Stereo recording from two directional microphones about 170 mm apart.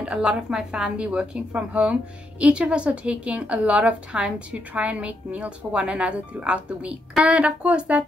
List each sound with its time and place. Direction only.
0.0 s a woman's voice: 5° right (ahead or behind)